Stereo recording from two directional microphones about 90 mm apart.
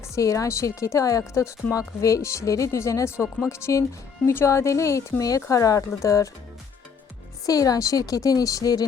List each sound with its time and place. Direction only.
0.1 s speech: 35° left (ahead or behind)
7.4 s speech: 40° left (ahead or behind)